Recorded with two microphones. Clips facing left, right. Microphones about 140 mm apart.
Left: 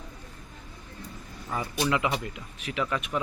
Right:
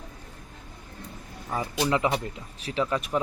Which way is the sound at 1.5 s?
20° right (ahead or behind).